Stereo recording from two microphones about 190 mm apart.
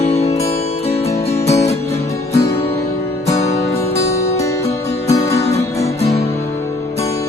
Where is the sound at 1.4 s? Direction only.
15° left (ahead or behind).